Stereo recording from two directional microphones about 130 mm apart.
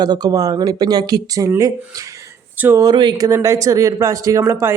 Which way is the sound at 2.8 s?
35° right (ahead or behind).